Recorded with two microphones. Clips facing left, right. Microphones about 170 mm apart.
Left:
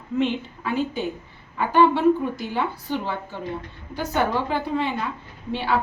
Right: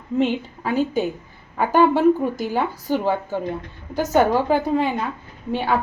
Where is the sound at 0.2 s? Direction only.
40° right (ahead or behind).